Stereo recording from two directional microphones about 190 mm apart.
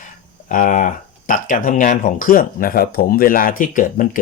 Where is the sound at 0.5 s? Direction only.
45° left (ahead or behind).